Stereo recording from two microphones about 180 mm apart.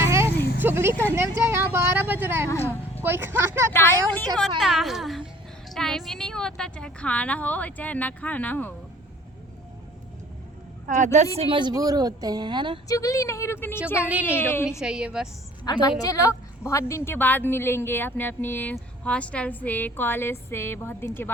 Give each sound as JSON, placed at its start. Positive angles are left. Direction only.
{"t": 0.0, "sound": "vehicle", "side_deg": -15}
{"t": 0.6, "sound": "speech", "side_deg": -15}
{"t": 1.1, "sound": "vehicle", "side_deg": -15}
{"t": 2.5, "sound": "a sound", "side_deg": 10}
{"t": 3.0, "sound": "speech", "side_deg": -10}
{"t": 3.7, "sound": "a woman's voice", "side_deg": 10}
{"t": 10.8, "sound": "a woman's voice", "side_deg": -40}
{"t": 11.3, "sound": "a woman's voice", "side_deg": -30}
{"t": 12.9, "sound": "a woman's voice", "side_deg": 20}
{"t": 14.0, "sound": "speech", "side_deg": -10}
{"t": 14.3, "sound": "a woman's voice", "side_deg": 10}
{"t": 14.8, "sound": "a child's voice", "side_deg": -5}
{"t": 15.6, "sound": "a woman's voice", "side_deg": 20}